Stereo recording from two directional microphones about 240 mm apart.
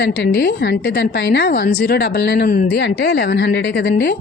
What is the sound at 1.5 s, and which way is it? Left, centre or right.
A woman's voice, left.